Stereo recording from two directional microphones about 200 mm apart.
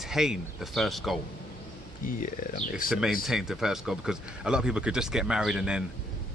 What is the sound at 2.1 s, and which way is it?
Speech, 45° left (ahead or behind).